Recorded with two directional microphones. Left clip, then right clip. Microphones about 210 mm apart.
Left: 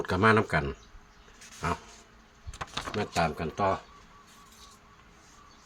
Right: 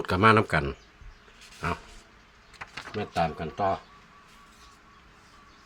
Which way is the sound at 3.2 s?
15° left (ahead or behind).